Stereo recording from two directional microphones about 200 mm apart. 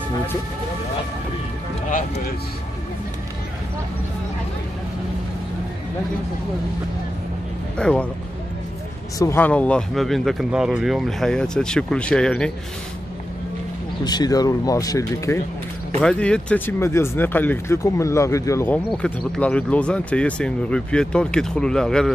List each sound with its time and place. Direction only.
1.9 s speech: 40° left (ahead or behind)
7.7 s speech: 5° left (ahead or behind)
9.2 s speech: 10° left (ahead or behind)
14.0 s speech: 20° left (ahead or behind)
16.0 s speech: 5° left (ahead or behind)